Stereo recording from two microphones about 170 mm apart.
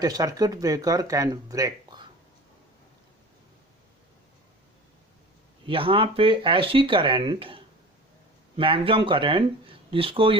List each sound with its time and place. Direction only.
0.0 s speech: 20° right (ahead or behind)
5.6 s speech: 30° right (ahead or behind)